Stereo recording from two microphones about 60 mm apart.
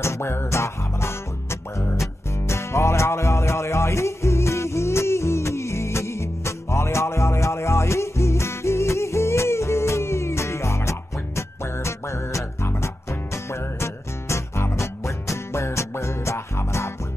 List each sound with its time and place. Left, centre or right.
0.0 s music: left